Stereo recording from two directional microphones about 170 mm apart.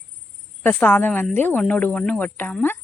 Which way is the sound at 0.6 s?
10° left (ahead or behind).